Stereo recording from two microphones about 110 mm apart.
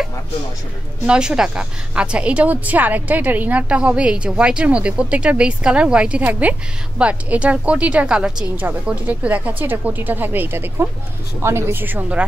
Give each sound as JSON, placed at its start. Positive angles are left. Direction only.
{"t": 1.0, "sound": "a woman's voice", "side_deg": -10}